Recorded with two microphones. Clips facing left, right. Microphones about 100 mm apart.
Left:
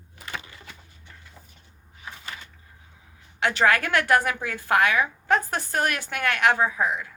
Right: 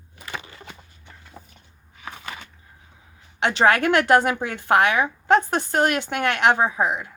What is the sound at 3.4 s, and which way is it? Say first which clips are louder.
A woman's voice: right 3 dB; 25° right (ahead or behind).